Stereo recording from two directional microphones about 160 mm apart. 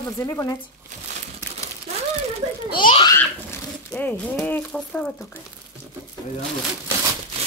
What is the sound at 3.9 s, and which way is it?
Speech, 10° left (ahead or behind).